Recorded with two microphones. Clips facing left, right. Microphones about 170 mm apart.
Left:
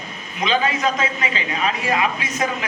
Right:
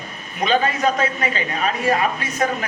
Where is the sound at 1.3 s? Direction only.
45° right (ahead or behind).